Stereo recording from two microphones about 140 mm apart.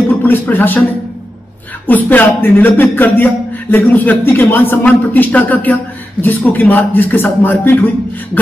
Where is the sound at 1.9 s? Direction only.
15° left (ahead or behind).